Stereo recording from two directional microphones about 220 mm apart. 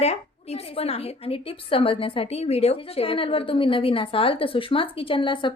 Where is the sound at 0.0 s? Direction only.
30° left (ahead or behind).